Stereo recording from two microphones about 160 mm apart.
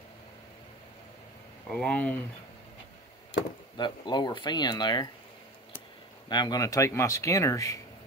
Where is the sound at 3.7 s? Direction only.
30° left (ahead or behind).